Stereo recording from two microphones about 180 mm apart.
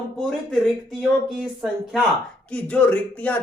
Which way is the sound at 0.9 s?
Centre (ahead or behind).